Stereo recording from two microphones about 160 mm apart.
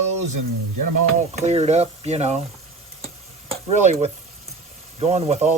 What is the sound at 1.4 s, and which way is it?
Speech, 40° right (ahead or behind).